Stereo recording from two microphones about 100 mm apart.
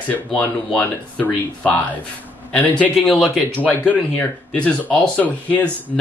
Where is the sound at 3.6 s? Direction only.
15° left (ahead or behind).